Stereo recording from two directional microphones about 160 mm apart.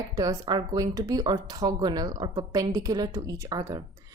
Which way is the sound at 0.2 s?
25° right (ahead or behind).